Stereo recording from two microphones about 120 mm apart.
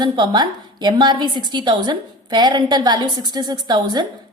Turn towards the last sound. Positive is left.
turn(degrees=-35)  # may be behind; listen again after turning